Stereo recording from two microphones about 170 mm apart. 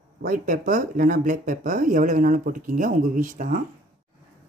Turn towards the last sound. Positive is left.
turn(degrees=-50)  # may be behind; listen again after turning